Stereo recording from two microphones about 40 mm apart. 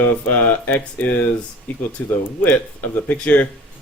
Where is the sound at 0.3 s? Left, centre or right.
Left.